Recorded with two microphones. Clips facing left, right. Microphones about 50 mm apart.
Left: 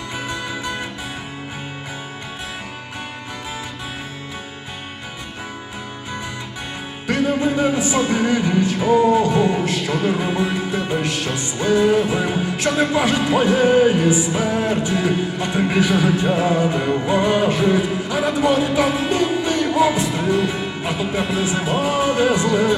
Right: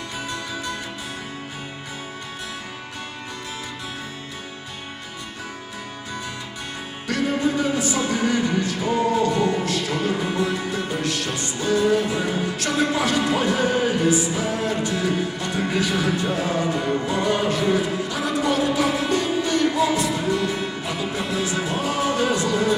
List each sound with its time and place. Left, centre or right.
0.3 s music: left
7.1 s music: left
14.3 s speech: left
21.7 s music: left